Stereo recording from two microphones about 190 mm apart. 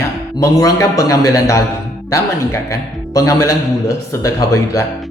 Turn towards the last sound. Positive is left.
turn(degrees=15)  # may be behind; listen again after turning